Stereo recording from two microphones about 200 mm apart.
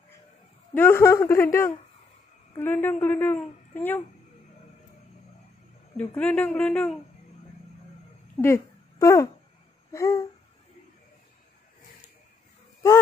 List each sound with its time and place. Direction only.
0.7 s a woman's voice: 10° left (ahead or behind)
5.9 s a woman's voice: 5° left (ahead or behind)
8.4 s a woman's voice: 15° left (ahead or behind)